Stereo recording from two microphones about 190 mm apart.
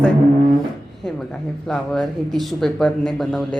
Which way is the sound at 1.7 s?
5° left (ahead or behind).